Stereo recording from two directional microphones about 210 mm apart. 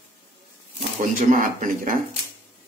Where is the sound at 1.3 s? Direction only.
40° right (ahead or behind).